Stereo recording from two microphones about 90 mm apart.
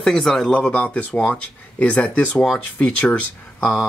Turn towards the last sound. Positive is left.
turn(degrees=15)  # may be behind; listen again after turning